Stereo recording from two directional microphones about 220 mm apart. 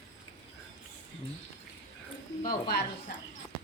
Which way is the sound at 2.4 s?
40° left (ahead or behind).